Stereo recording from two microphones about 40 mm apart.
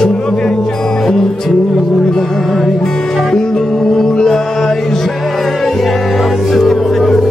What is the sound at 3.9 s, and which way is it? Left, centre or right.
Mantra, centre.